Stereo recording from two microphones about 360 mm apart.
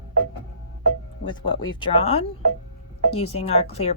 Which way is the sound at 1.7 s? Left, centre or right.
Centre.